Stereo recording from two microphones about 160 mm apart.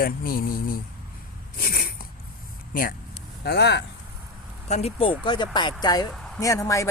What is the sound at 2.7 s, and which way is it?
Speech, 60° left (ahead or behind).